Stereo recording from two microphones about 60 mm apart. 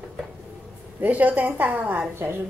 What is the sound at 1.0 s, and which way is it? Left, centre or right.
A woman's voice, right.